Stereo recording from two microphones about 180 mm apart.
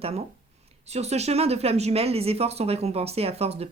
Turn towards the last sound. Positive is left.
turn(degrees=-35)  # may be behind; listen again after turning